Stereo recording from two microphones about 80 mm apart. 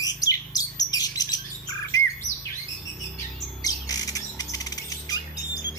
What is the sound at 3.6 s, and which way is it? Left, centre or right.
Squawk, left.